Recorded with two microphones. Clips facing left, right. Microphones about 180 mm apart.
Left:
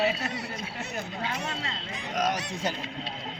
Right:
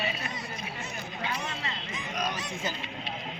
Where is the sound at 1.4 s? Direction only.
70° left (ahead or behind).